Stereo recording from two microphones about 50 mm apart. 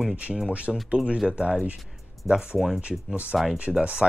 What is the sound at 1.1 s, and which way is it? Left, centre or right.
Speech, centre.